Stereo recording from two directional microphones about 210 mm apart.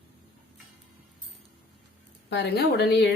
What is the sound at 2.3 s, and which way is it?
Speech, 55° left (ahead or behind).